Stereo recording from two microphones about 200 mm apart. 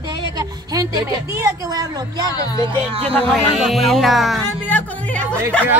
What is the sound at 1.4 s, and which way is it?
Speech, 20° right (ahead or behind).